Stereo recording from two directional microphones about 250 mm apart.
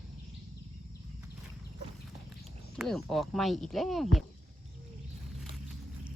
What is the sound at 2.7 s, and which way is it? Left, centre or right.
Speech, centre.